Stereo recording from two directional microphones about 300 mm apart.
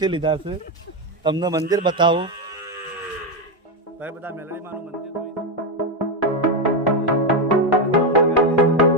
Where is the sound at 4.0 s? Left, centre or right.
Centre.